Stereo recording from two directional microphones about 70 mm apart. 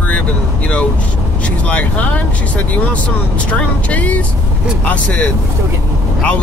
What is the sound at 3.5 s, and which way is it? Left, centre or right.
Speech, centre.